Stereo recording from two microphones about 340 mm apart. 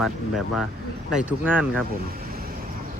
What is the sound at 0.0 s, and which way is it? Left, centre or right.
Speech, centre.